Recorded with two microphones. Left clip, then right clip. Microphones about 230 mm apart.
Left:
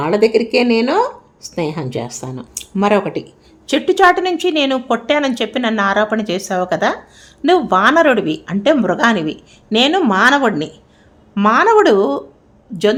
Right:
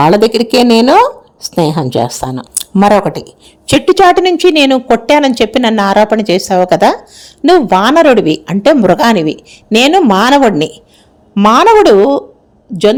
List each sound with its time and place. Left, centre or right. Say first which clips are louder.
0.0 s a woman's voice: right 6 dB; right